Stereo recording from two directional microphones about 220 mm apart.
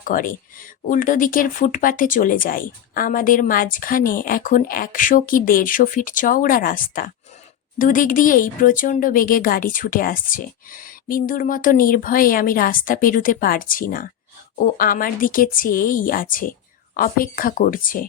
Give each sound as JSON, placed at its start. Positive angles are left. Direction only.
{"t": 0.0, "sound": "speech", "side_deg": 40}